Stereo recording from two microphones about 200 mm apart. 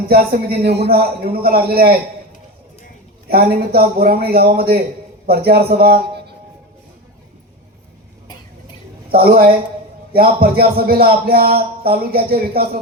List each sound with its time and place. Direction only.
0.1 s a man's voice: 50° right (ahead or behind)
3.2 s a man's voice: 50° right (ahead or behind)
9.1 s a man's voice: 50° right (ahead or behind)